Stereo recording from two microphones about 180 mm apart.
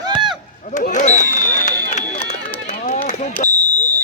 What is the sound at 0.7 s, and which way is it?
Speech, 40° left (ahead or behind).